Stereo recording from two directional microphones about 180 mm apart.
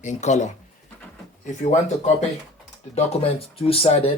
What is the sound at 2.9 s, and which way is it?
Speech, 35° left (ahead or behind).